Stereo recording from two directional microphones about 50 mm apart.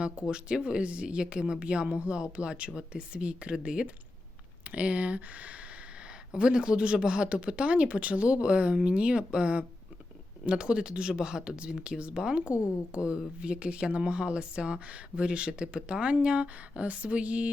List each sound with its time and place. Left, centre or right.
0.3 s speech: centre
6.3 s speech: centre
12.5 s a woman's voice: left
12.9 s speech: right